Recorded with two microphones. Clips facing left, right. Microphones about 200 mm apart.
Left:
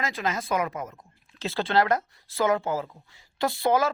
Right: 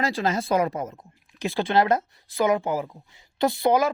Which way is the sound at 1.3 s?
15° right (ahead or behind).